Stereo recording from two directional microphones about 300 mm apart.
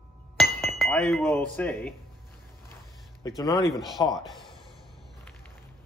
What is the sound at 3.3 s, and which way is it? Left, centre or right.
Speech, centre.